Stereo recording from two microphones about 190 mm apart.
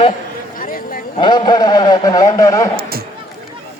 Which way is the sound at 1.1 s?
25° left (ahead or behind).